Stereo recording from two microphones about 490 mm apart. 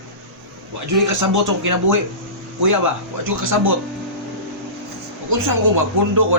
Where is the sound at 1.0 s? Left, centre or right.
Right.